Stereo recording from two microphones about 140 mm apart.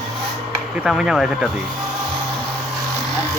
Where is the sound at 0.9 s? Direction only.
5° right (ahead or behind).